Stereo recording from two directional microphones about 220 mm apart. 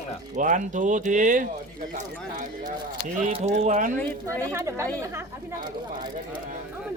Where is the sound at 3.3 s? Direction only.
30° right (ahead or behind).